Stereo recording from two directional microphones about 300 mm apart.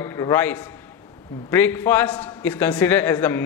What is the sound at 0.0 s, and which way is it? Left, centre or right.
A man's voice, centre.